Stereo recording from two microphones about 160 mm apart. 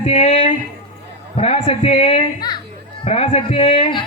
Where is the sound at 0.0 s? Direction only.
45° left (ahead or behind).